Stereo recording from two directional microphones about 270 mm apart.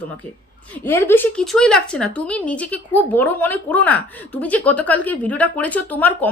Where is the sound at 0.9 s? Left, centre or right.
Centre.